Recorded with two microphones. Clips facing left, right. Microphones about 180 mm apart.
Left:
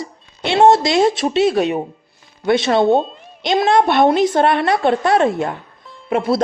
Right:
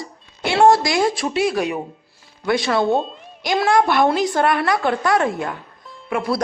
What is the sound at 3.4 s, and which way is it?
A woman's voice, 20° left (ahead or behind).